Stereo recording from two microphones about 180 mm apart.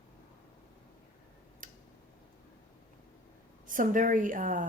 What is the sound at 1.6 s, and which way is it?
Tick-tock, 45° right (ahead or behind).